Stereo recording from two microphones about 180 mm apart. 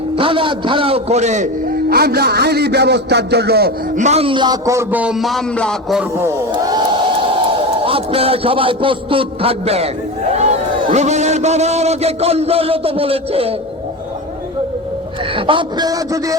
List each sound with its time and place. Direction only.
0.2 s a man's voice: 30° right (ahead or behind)
1.9 s a man's voice: 60° right (ahead or behind)
3.9 s a man's voice: 40° right (ahead or behind); by 6.1 s centre (ahead or behind)
6.5 s crowd: 25° right (ahead or behind)
7.8 s a man's voice: 30° right (ahead or behind)
15.4 s a man's voice: 30° right (ahead or behind)